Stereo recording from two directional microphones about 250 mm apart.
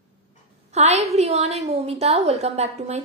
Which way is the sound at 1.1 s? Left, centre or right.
Right.